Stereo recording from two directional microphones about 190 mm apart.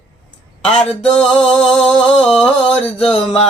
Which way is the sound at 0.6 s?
5° left (ahead or behind).